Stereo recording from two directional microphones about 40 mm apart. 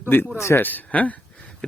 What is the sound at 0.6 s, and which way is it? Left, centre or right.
Speech, left.